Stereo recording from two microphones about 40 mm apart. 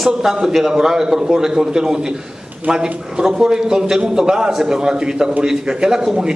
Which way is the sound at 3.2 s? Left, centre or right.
Centre.